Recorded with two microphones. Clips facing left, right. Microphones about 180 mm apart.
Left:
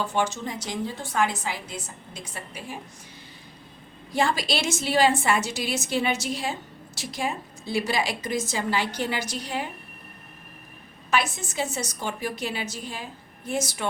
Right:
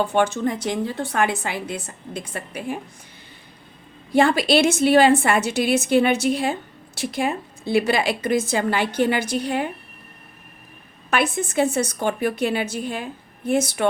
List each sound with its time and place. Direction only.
0.0 s a woman's voice: 60° right (ahead or behind)
4.1 s a woman's voice: 60° right (ahead or behind)
11.1 s a woman's voice: 55° right (ahead or behind)